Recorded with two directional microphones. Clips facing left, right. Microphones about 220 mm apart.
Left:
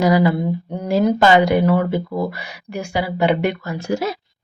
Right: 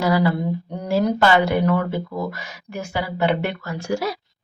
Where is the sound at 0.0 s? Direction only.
15° left (ahead or behind).